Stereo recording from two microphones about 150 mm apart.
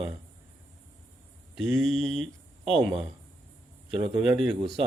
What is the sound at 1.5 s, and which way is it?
Speech, centre (ahead or behind).